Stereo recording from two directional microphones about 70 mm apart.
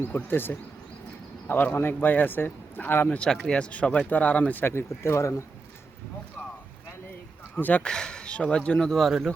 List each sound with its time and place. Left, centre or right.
0.1 s speech: left
3.2 s speech: centre
4.6 s speech: left
7.5 s speech: left; by 9.3 s centre